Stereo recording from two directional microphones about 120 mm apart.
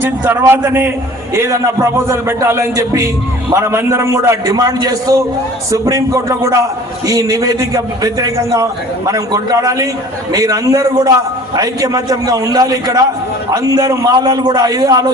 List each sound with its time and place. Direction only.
0.0 s a man's voice: 20° right (ahead or behind); by 15.1 s 35° right (ahead or behind)